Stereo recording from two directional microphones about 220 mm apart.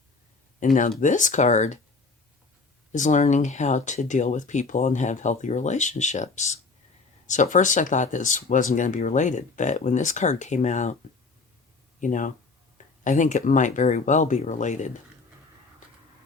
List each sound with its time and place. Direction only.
0.6 s speech: 35° left (ahead or behind)
2.9 s speech: 35° left (ahead or behind)
11.9 s speech: 35° left (ahead or behind)